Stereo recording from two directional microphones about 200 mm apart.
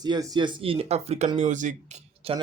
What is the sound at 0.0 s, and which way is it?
Speech, 20° right (ahead or behind).